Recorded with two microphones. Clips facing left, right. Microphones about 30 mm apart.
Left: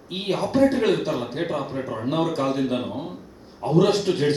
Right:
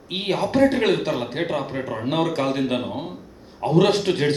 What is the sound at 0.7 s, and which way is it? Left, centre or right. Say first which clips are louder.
A man's voice: right 1 dB; right.